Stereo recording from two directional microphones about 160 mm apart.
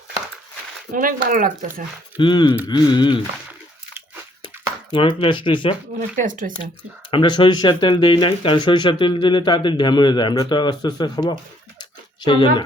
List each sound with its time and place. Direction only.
0.9 s speech: 60° right (ahead or behind)
2.1 s speech: 30° left (ahead or behind)
4.4 s speech: 30° left (ahead or behind)
6.1 s speech: 55° right (ahead or behind)
7.1 s speech: 30° left (ahead or behind)
11.8 s a sound: 25° left (ahead or behind)